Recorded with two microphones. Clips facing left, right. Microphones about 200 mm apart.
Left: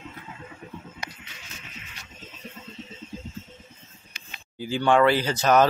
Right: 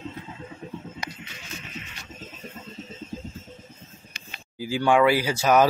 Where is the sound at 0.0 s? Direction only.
25° right (ahead or behind).